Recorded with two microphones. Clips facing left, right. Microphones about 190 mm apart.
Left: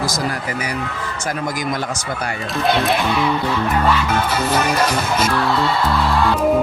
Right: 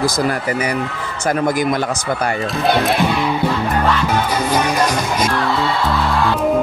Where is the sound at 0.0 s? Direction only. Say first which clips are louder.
Right 5 dB; 60° right (ahead or behind).